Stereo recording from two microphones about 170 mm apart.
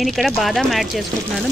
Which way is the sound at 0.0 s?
Centre (ahead or behind).